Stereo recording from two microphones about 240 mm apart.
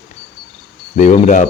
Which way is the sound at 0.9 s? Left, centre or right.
Left.